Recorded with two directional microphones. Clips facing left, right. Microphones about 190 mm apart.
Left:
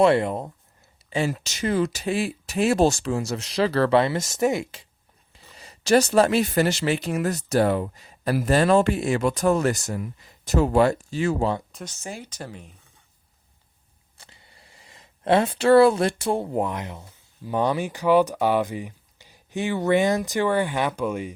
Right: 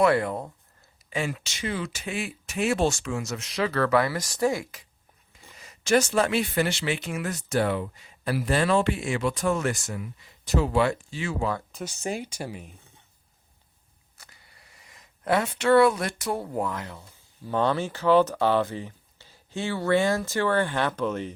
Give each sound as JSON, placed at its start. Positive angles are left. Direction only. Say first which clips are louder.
{"t": 0.0, "sound": "speech", "louder": "left 3 dB", "side_deg": 25}
{"t": 1.1, "sound": "speech", "louder": "left 5 dB", "side_deg": 35}
{"t": 11.7, "sound": "speech", "louder": "right 3 dB", "side_deg": 0}
{"t": 12.0, "sound": "speech", "louder": "right 5 dB", "side_deg": -15}
{"t": 14.2, "sound": "speech", "louder": "left 3 dB", "side_deg": 25}